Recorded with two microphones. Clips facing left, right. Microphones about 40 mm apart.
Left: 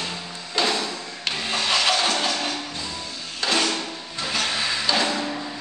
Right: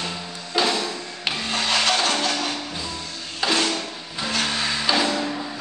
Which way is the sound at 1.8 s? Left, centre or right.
Centre.